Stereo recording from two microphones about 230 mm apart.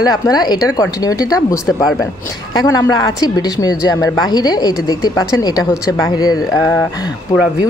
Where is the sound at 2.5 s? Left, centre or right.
Centre.